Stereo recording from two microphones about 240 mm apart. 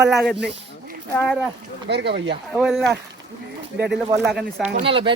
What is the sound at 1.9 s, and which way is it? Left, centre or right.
Speech, right.